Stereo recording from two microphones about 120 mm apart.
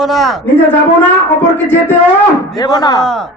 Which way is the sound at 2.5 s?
35° left (ahead or behind).